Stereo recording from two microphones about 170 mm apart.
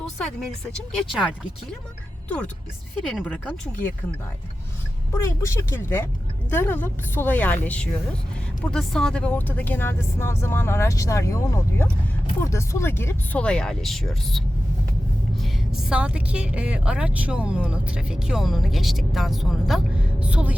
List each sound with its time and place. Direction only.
0.0 s a sound: 5° left (ahead or behind)
0.9 s a woman's voice: centre (ahead or behind)
3.1 s speech: 5° left (ahead or behind)
5.1 s a woman's voice: 15° left (ahead or behind); by 20.6 s 10° right (ahead or behind)